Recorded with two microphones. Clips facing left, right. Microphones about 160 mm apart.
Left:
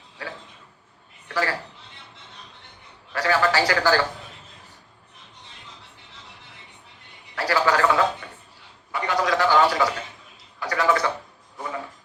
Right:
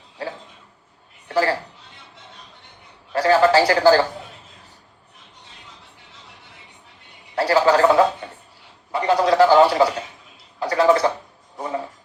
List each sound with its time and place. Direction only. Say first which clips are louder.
1.3 s a man's voice: right 6 dB; 30° right (ahead or behind)
3.1 s a man's voice: right 7 dB; 30° right (ahead or behind)
7.3 s a sound: right 5 dB; 30° right (ahead or behind)
11.5 s music: right 5 dB; 30° right (ahead or behind)